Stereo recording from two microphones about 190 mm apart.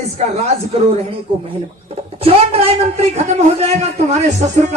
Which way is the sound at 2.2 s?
30° right (ahead or behind).